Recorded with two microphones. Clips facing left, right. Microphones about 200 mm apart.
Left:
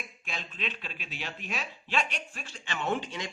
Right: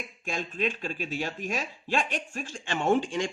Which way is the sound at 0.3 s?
45° right (ahead or behind).